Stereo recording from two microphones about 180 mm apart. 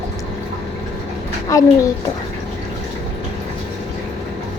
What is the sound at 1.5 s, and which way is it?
Child singing, 20° left (ahead or behind).